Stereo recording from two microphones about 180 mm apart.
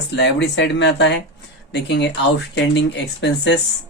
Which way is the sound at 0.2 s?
70° left (ahead or behind).